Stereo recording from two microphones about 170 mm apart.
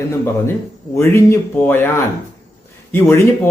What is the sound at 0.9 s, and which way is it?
A man's voice, 15° left (ahead or behind).